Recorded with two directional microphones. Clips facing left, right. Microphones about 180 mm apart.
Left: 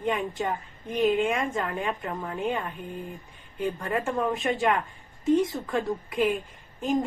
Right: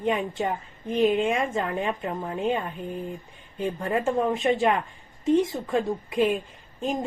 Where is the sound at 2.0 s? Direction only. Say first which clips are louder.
Right 2 dB; 25° right (ahead or behind).